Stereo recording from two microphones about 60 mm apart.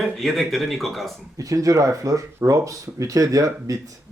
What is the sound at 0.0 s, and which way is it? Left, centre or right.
A man's voice, centre.